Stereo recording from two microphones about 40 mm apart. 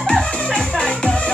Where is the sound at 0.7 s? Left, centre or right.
Centre.